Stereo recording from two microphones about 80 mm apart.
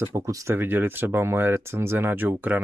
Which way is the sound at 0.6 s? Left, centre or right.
Right.